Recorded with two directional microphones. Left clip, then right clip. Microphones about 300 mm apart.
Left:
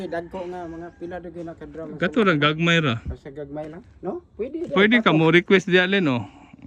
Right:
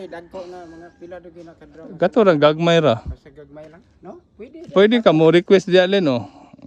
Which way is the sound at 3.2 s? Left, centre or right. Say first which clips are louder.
Left 7 dB; left.